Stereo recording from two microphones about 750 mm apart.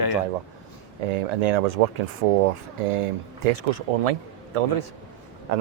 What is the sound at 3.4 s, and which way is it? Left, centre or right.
Speech, right.